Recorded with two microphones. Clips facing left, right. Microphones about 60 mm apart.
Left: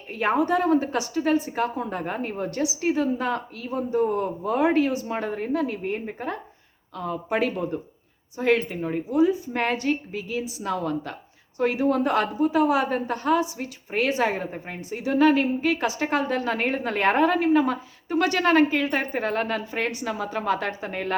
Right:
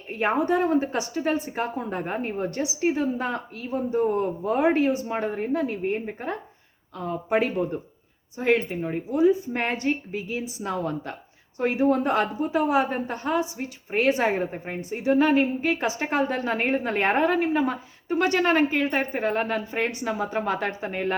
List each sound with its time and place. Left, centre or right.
0.1 s a woman's voice: right
7.5 s a woman's voice: centre
9.1 s a woman's voice: right